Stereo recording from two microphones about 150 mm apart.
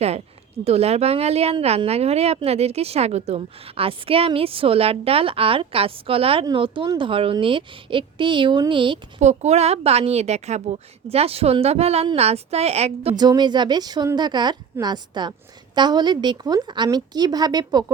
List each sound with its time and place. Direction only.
0.6 s speech: 45° right (ahead or behind)
9.2 s a woman's voice: 45° right (ahead or behind)
13.1 s a woman's voice: 30° right (ahead or behind)